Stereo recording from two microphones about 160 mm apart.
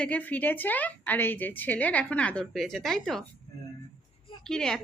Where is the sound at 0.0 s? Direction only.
10° left (ahead or behind).